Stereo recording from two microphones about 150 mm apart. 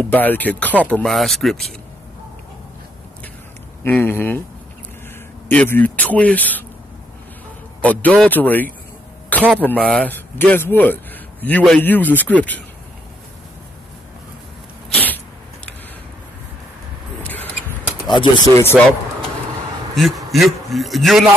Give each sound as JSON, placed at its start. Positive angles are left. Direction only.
{"t": 0.1, "sound": "a man's voice", "side_deg": 10}
{"t": 3.8, "sound": "speech", "side_deg": 15}
{"t": 5.5, "sound": "speech", "side_deg": 10}
{"t": 7.8, "sound": "speech", "side_deg": 10}
{"t": 14.9, "sound": "sneeze", "side_deg": 10}
{"t": 17.2, "sound": "a sound", "side_deg": 10}
{"t": 18.0, "sound": "speech", "side_deg": 30}
{"t": 18.6, "sound": "speech", "side_deg": 15}
{"t": 20.0, "sound": "a man's voice", "side_deg": 0}